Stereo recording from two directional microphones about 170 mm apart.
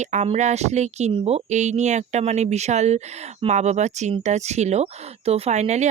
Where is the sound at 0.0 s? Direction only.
40° right (ahead or behind).